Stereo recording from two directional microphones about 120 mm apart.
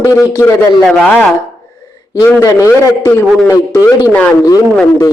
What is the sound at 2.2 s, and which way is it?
Speech, 25° left (ahead or behind).